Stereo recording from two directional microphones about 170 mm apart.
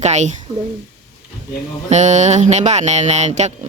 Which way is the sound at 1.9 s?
45° right (ahead or behind).